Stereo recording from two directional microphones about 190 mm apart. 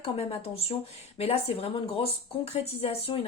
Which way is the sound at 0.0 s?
30° left (ahead or behind).